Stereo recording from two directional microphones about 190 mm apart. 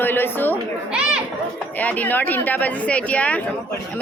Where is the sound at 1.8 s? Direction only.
10° left (ahead or behind).